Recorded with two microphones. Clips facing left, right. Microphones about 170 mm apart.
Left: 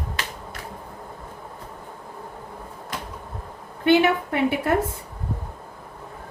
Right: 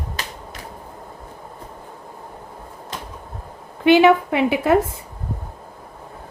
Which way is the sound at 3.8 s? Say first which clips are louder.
Right 5 dB; 90° right.